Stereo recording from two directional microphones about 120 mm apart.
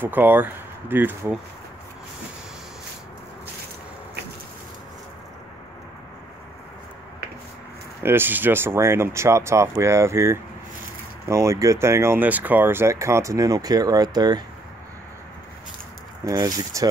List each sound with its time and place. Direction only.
0.0 s speech: 15° right (ahead or behind)
8.0 s speech: 20° right (ahead or behind); by 14.4 s 35° right (ahead or behind)
16.3 s speech: 30° right (ahead or behind)